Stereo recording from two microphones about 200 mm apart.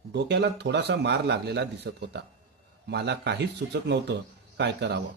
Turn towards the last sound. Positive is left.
turn(degrees=-60)  # may be behind; listen again after turning